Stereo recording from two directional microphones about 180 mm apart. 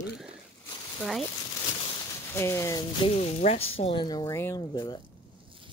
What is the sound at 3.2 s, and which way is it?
Speech, 35° left (ahead or behind).